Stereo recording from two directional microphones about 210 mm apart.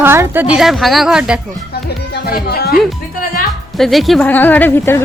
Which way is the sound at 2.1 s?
50° left (ahead or behind).